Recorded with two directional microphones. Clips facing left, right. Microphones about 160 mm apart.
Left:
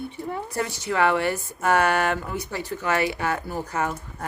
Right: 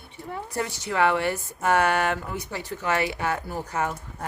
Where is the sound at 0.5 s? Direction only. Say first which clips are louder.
Even; 20° right (ahead or behind).